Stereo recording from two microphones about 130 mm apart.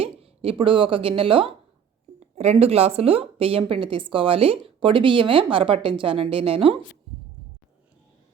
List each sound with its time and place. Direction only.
0.0 s a sound: 45° right (ahead or behind)
0.6 s a woman's voice: 40° right (ahead or behind)
2.3 s a woman's voice: 55° right (ahead or behind)